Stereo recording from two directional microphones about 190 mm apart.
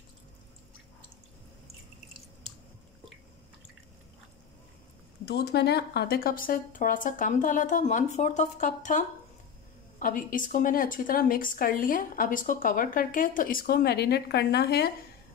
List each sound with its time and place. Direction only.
5.2 s a woman's voice: 60° left (ahead or behind)